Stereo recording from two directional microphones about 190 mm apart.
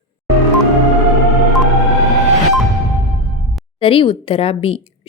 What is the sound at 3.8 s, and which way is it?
A woman's voice, 30° left (ahead or behind).